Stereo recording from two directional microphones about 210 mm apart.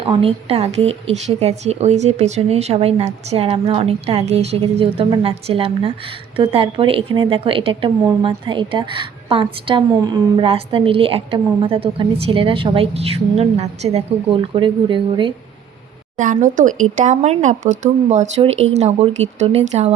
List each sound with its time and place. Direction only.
0.0 s a woman's voice: 25° right (ahead or behind)
16.1 s speech: 35° right (ahead or behind)